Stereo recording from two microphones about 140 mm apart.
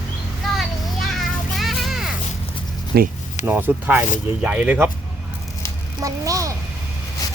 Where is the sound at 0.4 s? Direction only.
Centre (ahead or behind).